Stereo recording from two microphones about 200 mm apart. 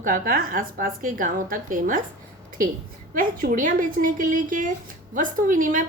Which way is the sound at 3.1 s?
45° right (ahead or behind).